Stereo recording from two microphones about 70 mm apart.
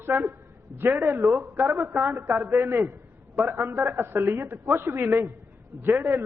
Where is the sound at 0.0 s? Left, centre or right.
Right.